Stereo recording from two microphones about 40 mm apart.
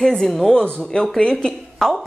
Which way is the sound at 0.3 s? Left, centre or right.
Centre.